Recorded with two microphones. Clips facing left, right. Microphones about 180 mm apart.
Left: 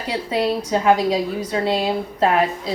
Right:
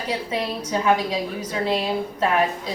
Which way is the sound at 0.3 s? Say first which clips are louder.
Left 6 dB; 35° left (ahead or behind).